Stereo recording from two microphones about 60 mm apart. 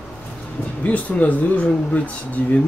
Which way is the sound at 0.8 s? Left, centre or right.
Left.